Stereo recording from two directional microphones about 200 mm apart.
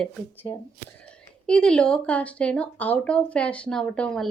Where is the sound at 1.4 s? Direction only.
5° left (ahead or behind).